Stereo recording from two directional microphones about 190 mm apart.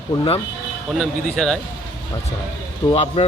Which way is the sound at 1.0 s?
Centre (ahead or behind).